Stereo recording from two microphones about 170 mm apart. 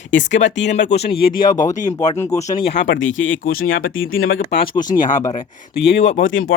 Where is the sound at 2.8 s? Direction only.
90° left.